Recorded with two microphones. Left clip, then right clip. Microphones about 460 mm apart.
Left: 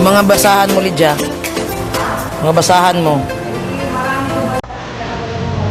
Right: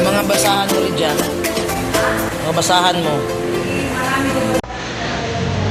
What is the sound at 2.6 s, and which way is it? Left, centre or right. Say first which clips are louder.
Music: left 4 dB; centre.